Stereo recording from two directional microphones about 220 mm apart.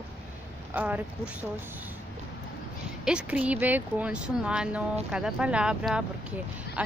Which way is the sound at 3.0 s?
5° right (ahead or behind).